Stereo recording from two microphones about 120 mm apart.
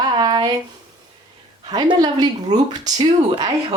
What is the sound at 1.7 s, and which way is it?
Speech, 35° right (ahead or behind).